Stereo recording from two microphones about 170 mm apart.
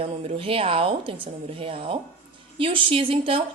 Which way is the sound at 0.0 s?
35° right (ahead or behind).